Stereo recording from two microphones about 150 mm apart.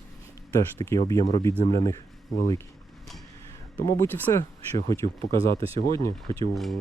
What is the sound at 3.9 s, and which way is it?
Speech, 15° left (ahead or behind).